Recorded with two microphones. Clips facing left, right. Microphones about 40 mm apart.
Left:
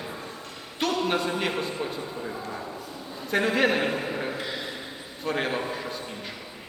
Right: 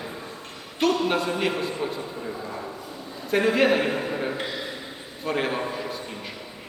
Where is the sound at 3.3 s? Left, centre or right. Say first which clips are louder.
Right 3 dB; centre.